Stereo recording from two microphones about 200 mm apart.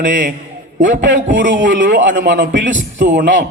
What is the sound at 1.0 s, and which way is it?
A man's voice, 65° right (ahead or behind).